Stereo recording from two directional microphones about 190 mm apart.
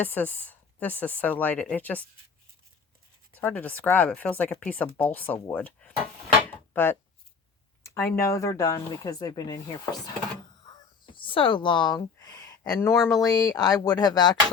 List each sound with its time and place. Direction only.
0.0 s speech: 10° left (ahead or behind)
3.4 s speech: 10° left (ahead or behind)
7.9 s speech: 15° left (ahead or behind)
11.0 s speech: 25° left (ahead or behind)